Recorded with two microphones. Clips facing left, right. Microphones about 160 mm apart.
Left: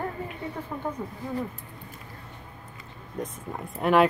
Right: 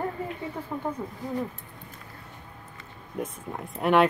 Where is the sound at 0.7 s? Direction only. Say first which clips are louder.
Right 2 dB; 15° right (ahead or behind).